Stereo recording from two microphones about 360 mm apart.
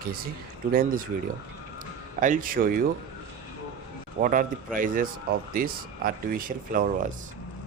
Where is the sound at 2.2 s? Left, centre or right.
Right.